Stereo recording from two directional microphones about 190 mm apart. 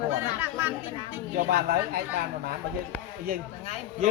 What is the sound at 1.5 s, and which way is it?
Speech, 55° right (ahead or behind).